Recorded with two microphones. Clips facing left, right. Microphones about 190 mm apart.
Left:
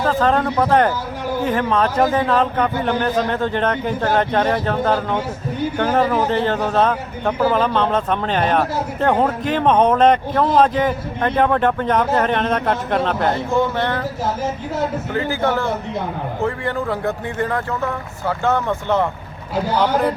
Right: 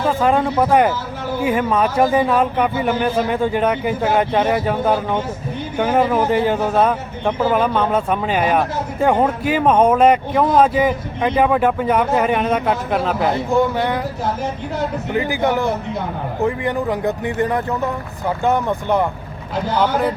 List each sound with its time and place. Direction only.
0.0 s speech: 10° right (ahead or behind)
15.1 s speech: 15° right (ahead or behind)